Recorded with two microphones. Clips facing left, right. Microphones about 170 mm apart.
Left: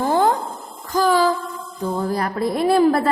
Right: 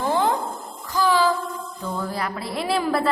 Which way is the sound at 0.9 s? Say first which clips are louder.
Left 3 dB; 45° left (ahead or behind).